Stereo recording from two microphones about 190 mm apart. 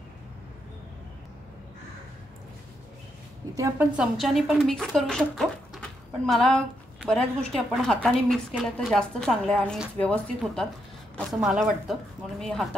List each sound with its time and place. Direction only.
3.5 s a woman's voice: 15° right (ahead or behind)
3.9 s speech: centre (ahead or behind)